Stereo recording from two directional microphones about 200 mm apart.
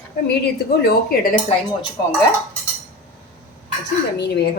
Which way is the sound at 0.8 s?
50° left (ahead or behind).